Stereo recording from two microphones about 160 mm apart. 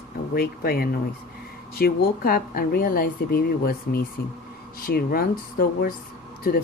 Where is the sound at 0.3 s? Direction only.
70° left (ahead or behind).